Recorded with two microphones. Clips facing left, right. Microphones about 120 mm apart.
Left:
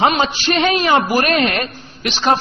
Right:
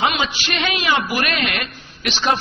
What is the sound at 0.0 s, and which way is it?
A man's voice, 40° left (ahead or behind).